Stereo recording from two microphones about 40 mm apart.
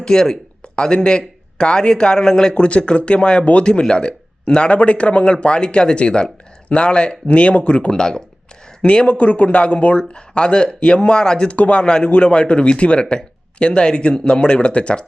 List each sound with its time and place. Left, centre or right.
0.0 s speech: centre
2.6 s speech: left
7.9 s speech: centre
11.5 s speech: left
11.8 s speech: left